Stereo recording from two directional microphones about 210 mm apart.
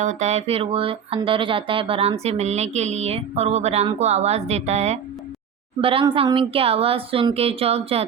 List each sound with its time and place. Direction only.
0.0 s a woman's voice: 35° right (ahead or behind)